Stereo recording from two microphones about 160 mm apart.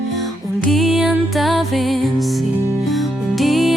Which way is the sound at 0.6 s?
Centre (ahead or behind).